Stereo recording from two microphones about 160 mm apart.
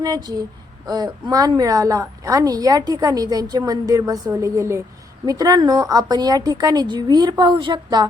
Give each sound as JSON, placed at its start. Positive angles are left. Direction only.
{"t": 0.0, "sound": "a woman's voice", "side_deg": -25}